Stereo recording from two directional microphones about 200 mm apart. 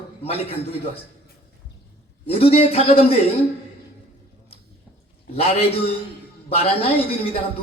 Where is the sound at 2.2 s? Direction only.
30° left (ahead or behind).